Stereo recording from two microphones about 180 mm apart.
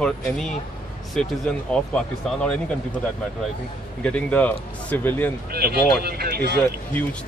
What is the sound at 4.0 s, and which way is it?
Speech, 5° left (ahead or behind).